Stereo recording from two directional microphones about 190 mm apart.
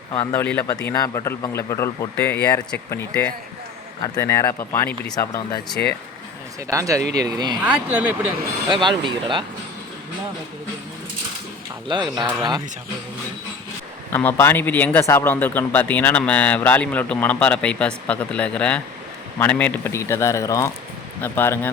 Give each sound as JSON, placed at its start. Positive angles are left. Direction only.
{"t": 0.3, "sound": "speech", "side_deg": 10}
{"t": 6.7, "sound": "speech", "side_deg": -15}
{"t": 8.7, "sound": "speech", "side_deg": -25}
{"t": 11.9, "sound": "speech", "side_deg": -25}
{"t": 14.1, "sound": "speech", "side_deg": 10}